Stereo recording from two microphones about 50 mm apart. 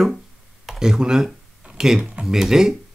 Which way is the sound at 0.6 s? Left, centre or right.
Centre.